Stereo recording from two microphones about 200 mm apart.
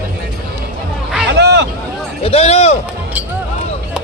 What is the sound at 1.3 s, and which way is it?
Vehicle, 60° right (ahead or behind).